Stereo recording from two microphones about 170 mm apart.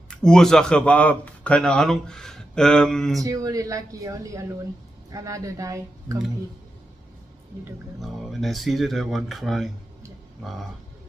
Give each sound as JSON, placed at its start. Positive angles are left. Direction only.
{"t": 0.1, "sound": "a man's voice", "side_deg": 5}
{"t": 3.2, "sound": "speech", "side_deg": -20}
{"t": 8.0, "sound": "a man's voice", "side_deg": 0}